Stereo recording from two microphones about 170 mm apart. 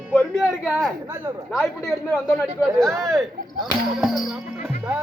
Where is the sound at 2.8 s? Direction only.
20° right (ahead or behind).